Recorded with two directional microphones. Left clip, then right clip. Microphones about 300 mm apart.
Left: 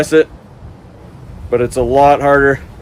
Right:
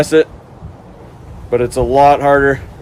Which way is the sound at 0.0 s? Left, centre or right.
Centre.